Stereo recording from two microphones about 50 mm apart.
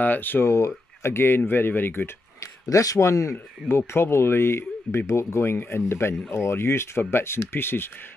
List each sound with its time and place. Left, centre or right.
0.0 s speech: left
0.5 s speech: left
2.4 s speech: left
3.6 s speech: left